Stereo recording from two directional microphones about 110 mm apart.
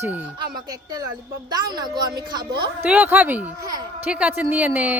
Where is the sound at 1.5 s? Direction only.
40° right (ahead or behind).